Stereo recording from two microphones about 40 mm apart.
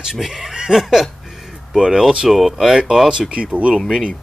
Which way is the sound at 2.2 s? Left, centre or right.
Centre.